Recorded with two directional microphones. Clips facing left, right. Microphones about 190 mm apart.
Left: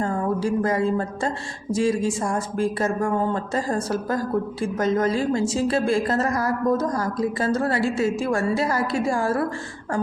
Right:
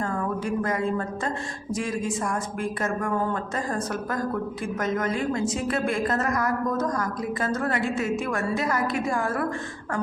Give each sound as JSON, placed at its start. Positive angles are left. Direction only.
{"t": 0.0, "sound": "a woman's voice", "side_deg": 30}